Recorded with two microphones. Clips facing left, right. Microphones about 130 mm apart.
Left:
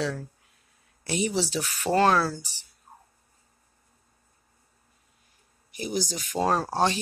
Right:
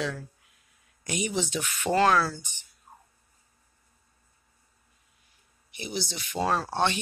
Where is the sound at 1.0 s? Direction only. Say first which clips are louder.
Left 3 dB; 35° left (ahead or behind).